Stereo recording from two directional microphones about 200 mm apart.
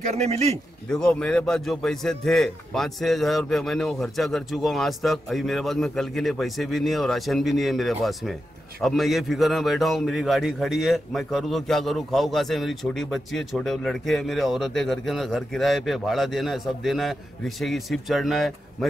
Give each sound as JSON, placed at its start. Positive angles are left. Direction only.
{"t": 0.0, "sound": "a man's voice", "side_deg": -35}
{"t": 0.8, "sound": "a man's voice", "side_deg": 5}